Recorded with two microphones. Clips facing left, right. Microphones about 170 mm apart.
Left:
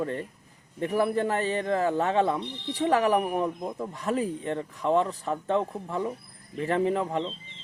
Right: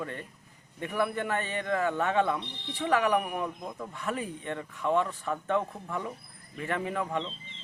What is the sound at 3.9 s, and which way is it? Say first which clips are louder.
Speech: left 6 dB; 35° left (ahead or behind).